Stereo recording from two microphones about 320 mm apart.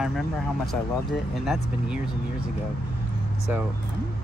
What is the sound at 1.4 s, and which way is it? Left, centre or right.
Speech, centre.